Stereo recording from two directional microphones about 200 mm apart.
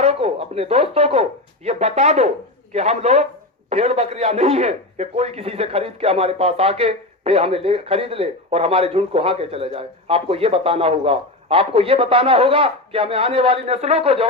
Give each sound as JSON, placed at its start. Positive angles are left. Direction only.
{"t": 0.0, "sound": "a man's voice", "side_deg": -30}